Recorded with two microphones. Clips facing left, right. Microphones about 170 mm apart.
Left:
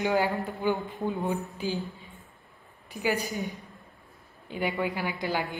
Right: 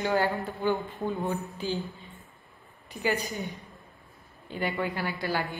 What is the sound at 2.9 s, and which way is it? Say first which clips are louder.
Speech: even; centre (ahead or behind).